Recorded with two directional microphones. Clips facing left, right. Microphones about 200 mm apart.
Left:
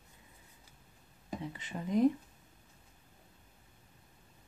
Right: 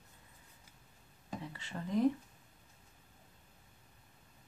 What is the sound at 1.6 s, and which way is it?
Speech, 15° left (ahead or behind).